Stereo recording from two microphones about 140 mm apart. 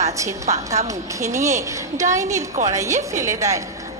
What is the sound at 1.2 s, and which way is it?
A woman's voice, 20° right (ahead or behind).